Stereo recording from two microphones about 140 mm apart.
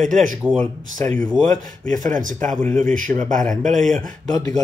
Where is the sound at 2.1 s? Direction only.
70° right (ahead or behind).